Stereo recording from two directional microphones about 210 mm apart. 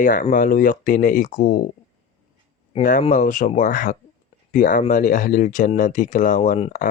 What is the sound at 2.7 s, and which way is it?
Speech, 35° left (ahead or behind).